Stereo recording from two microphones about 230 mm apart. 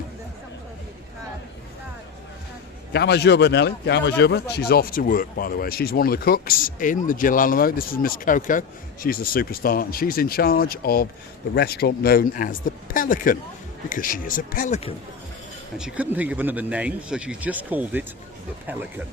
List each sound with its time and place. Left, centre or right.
2.9 s speech: left
15.8 s speech: centre